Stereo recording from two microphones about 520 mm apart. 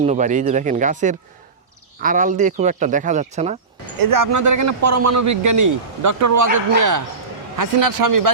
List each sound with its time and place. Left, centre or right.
0.0 s speech: centre
4.0 s a man's voice: right